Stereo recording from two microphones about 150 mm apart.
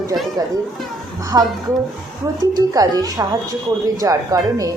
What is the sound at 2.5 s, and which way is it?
Speech, 25° right (ahead or behind).